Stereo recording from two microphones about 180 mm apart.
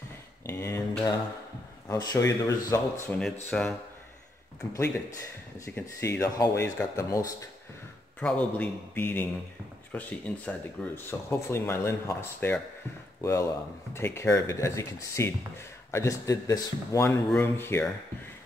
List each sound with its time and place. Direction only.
0.5 s speech: 15° left (ahead or behind)
3.4 s speech: 5° left (ahead or behind)
4.6 s speech: 15° left (ahead or behind)
8.2 s speech: 5° left (ahead or behind)